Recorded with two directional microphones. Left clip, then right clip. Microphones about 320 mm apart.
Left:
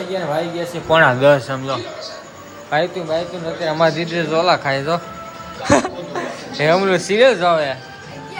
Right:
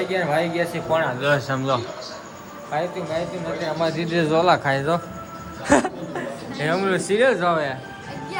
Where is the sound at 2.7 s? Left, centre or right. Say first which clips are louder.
Left 7 dB; left.